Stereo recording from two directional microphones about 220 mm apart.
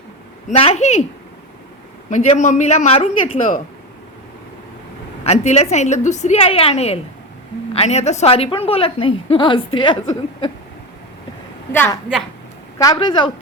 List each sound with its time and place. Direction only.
0.4 s a woman's voice: 25° left (ahead or behind)
2.0 s a man's voice: 35° left (ahead or behind)
5.2 s a woman's voice: 30° left (ahead or behind)
11.7 s a woman's voice: 10° left (ahead or behind)
12.8 s a woman's voice: 20° left (ahead or behind)